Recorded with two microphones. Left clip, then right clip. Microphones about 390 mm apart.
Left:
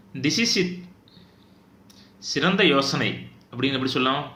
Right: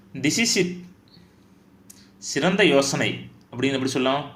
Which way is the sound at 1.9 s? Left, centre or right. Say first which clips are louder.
Left 2 dB; centre.